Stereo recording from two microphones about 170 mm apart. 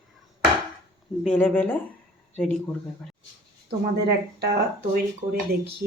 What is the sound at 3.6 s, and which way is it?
Speech, 75° right (ahead or behind).